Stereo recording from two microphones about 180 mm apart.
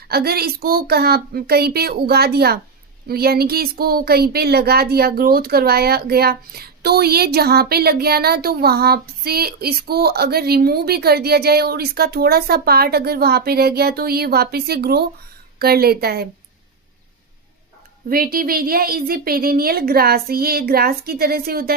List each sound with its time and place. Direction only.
0.1 s speech: 60° right (ahead or behind)
18.1 s speech: 55° right (ahead or behind)